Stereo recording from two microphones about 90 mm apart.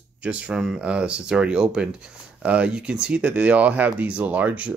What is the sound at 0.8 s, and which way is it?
Speech, 10° right (ahead or behind).